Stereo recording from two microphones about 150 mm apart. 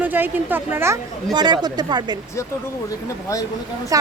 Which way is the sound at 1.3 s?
30° right (ahead or behind).